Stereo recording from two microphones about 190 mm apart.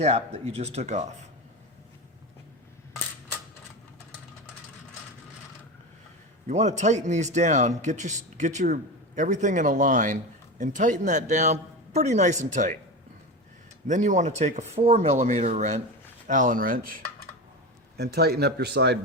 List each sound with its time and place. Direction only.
0.0 s a man's voice: 35° right (ahead or behind)
6.5 s a man's voice: 35° right (ahead or behind)
13.8 s a man's voice: 40° right (ahead or behind)
17.9 s speech: 60° right (ahead or behind)